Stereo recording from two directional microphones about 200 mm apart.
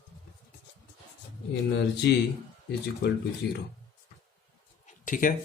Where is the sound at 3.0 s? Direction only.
55° left (ahead or behind).